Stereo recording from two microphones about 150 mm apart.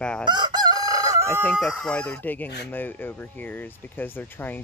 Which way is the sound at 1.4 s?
5° left (ahead or behind).